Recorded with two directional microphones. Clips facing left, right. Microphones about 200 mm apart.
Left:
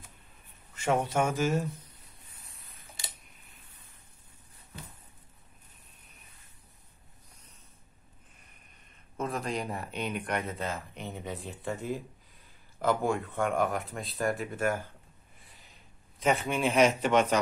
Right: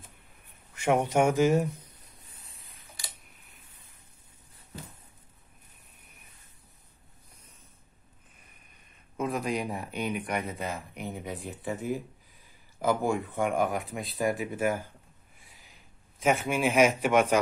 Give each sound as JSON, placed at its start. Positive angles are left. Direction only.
{"t": 0.7, "sound": "speech", "side_deg": -15}
{"t": 2.3, "sound": "a sound", "side_deg": 0}
{"t": 3.0, "sound": "camera", "side_deg": 25}
{"t": 9.3, "sound": "speech", "side_deg": 0}
{"t": 11.3, "sound": "speech", "side_deg": 0}
{"t": 12.7, "sound": "speech", "side_deg": -15}
{"t": 16.2, "sound": "speech", "side_deg": -5}